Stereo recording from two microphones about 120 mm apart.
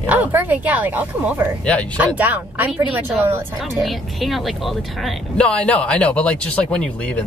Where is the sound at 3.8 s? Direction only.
Centre (ahead or behind).